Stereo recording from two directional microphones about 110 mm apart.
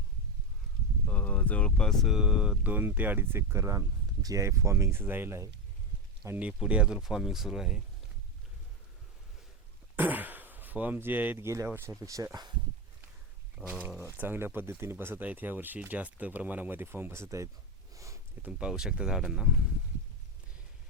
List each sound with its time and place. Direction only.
1.0 s speech: 15° left (ahead or behind); by 6.5 s 20° right (ahead or behind)
6.5 s speech: 10° right (ahead or behind)
9.9 s speech: 15° right (ahead or behind); by 12.5 s 35° right (ahead or behind)
13.6 s speech: 10° right (ahead or behind)
14.2 s speech: 20° right (ahead or behind)
17.9 s sniff: 30° right (ahead or behind)
18.4 s speech: 5° right (ahead or behind)